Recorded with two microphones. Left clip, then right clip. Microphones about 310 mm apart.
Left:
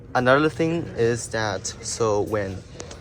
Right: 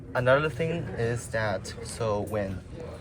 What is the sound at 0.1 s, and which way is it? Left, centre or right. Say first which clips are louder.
Speech: left 5 dB; left.